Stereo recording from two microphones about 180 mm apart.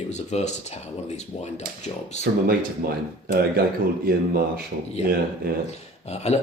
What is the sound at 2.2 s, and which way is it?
Speech, 60° right (ahead or behind).